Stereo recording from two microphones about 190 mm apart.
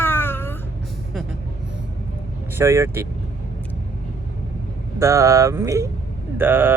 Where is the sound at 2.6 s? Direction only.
15° right (ahead or behind).